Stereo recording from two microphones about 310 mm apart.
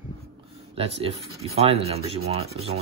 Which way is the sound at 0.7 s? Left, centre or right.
Centre.